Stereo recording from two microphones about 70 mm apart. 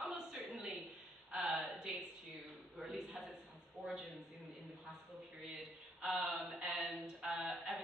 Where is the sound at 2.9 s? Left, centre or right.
Centre.